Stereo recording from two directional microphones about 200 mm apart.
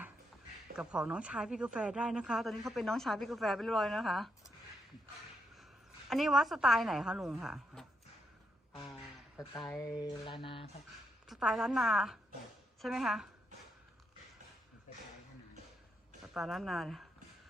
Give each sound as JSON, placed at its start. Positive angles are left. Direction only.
{"t": 0.8, "sound": "speech", "side_deg": -5}
{"t": 6.1, "sound": "speech", "side_deg": 0}
{"t": 9.6, "sound": "speech", "side_deg": 0}
{"t": 10.0, "sound": "mantra", "side_deg": 25}
{"t": 11.3, "sound": "speech", "side_deg": 0}
{"t": 16.3, "sound": "speech", "side_deg": 0}